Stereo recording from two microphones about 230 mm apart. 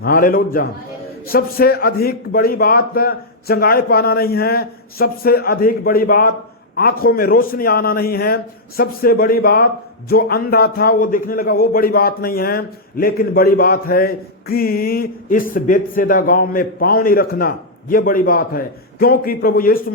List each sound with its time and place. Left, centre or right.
0.0 s a man's voice: left